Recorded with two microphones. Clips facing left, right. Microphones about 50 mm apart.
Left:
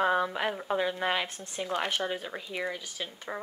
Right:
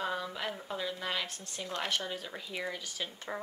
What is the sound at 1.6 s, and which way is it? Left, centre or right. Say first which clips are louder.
Speech: left 5 dB; centre.